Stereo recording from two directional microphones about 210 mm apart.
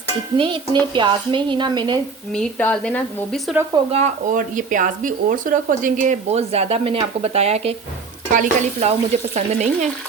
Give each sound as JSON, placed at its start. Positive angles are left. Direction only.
{"t": 0.3, "sound": "a woman's voice", "side_deg": -25}
{"t": 2.3, "sound": "speech", "side_deg": 5}
{"t": 3.9, "sound": "speech", "side_deg": -35}